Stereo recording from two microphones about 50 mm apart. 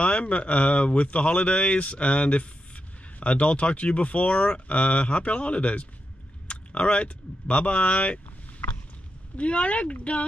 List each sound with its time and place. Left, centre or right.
0.0 s speech: left
9.4 s speech: left